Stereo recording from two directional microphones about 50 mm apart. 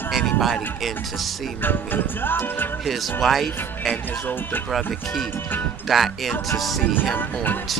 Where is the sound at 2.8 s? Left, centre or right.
Centre.